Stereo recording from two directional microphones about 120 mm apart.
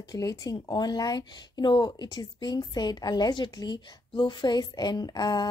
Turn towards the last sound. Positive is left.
turn(degrees=35)  # may be behind; listen again after turning